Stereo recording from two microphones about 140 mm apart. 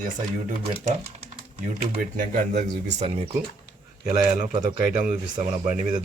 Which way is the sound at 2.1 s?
70° right (ahead or behind).